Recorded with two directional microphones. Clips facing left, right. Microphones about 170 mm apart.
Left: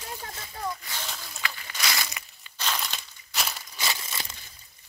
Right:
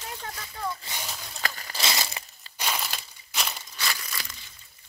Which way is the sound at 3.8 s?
25° left (ahead or behind).